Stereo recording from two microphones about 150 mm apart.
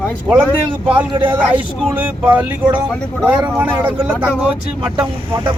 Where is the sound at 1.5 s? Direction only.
10° right (ahead or behind).